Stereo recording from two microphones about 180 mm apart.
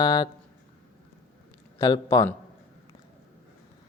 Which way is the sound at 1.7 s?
20° left (ahead or behind).